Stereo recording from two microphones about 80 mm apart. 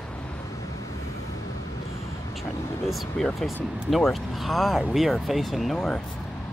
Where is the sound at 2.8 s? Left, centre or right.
Centre.